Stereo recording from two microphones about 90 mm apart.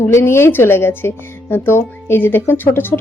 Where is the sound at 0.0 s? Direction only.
30° left (ahead or behind).